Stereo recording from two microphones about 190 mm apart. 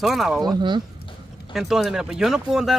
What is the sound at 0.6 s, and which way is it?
Speech, 25° right (ahead or behind).